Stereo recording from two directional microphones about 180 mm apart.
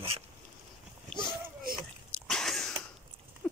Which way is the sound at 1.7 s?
55° right (ahead or behind).